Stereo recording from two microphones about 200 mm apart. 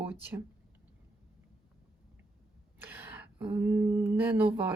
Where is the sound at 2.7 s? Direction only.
10° right (ahead or behind).